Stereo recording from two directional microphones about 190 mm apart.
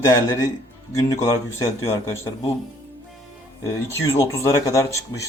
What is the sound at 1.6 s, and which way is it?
Speech, 15° left (ahead or behind).